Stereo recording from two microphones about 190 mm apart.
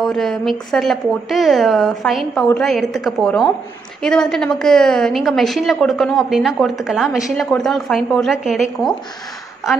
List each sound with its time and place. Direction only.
0.0 s a woman's voice: 5° left (ahead or behind)